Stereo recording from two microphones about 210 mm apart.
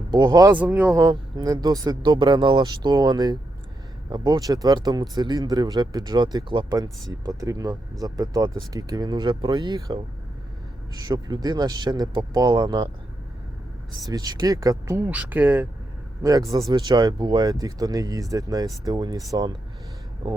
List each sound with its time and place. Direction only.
0.1 s speech: 20° right (ahead or behind)
0.5 s speech: 5° right (ahead or behind)
11.0 s speech: 20° right (ahead or behind)
14.0 s speech: 20° right (ahead or behind)